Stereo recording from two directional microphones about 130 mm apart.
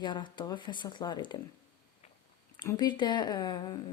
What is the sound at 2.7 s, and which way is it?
Speech, 35° left (ahead or behind).